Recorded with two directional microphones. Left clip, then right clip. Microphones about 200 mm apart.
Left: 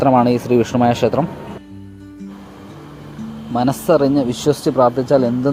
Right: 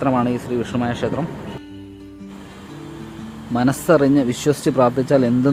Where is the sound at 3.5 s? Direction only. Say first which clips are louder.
Left 1 dB; centre (ahead or behind).